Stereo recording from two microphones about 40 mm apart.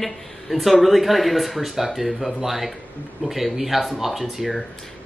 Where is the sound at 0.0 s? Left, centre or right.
Centre.